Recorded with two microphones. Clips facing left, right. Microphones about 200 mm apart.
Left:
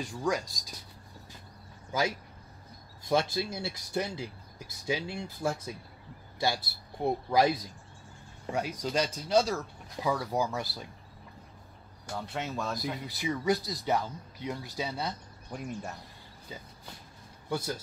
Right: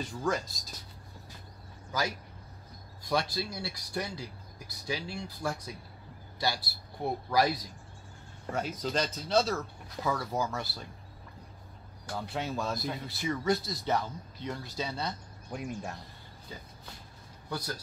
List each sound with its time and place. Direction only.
0.0 s speech: 15° left (ahead or behind)
1.9 s speech: 20° left (ahead or behind)
7.0 s speech: 20° left (ahead or behind)
8.5 s speech: 10° left (ahead or behind)
12.1 s speech: centre (ahead or behind)
13.0 s speech: 15° left (ahead or behind)
15.5 s speech: centre (ahead or behind)
17.5 s a man's voice: 20° left (ahead or behind)